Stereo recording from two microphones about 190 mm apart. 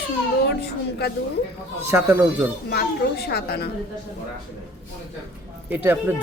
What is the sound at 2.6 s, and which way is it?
A woman's voice, 55° left (ahead or behind).